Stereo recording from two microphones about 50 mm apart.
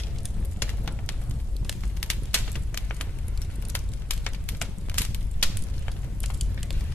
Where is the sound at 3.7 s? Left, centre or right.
Left.